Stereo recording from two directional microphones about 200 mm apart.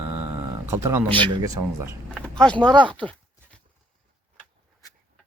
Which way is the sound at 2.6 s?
20° right (ahead or behind).